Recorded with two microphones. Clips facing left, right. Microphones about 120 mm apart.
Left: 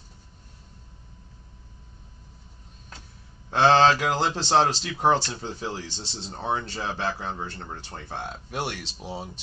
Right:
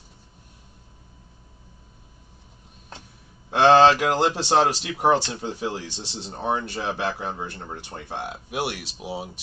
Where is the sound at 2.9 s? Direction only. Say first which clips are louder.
Right 4 dB; 25° right (ahead or behind).